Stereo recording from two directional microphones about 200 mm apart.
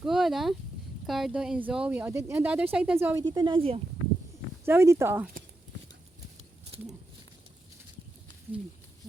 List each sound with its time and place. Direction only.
0.0 s a sound: centre (ahead or behind)
1.0 s speech: centre (ahead or behind)
3.3 s speech: 25° right (ahead or behind)
4.6 s speech: 10° right (ahead or behind)